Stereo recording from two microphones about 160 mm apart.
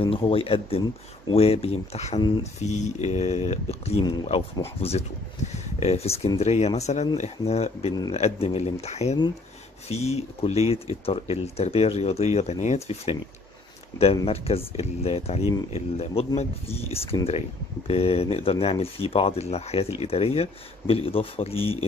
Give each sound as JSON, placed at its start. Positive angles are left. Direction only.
{"t": 0.0, "sound": "speech", "side_deg": 35}
{"t": 2.1, "sound": "speech", "side_deg": 30}
{"t": 2.6, "sound": "speech", "side_deg": 45}
{"t": 4.8, "sound": "speech", "side_deg": 40}